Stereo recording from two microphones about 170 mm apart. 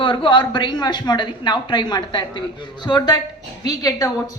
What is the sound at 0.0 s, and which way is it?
A woman's voice, 30° left (ahead or behind).